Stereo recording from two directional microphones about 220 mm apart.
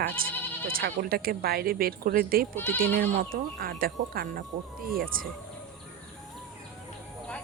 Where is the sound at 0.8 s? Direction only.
45° right (ahead or behind).